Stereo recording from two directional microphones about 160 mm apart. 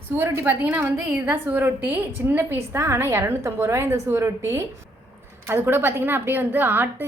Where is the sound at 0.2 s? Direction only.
15° right (ahead or behind).